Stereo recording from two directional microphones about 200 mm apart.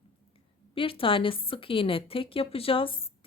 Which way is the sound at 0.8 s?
25° left (ahead or behind).